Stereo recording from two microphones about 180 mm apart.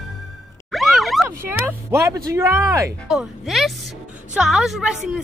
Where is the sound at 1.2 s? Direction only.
15° right (ahead or behind).